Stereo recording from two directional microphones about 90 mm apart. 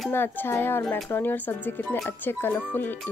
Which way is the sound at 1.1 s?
20° left (ahead or behind).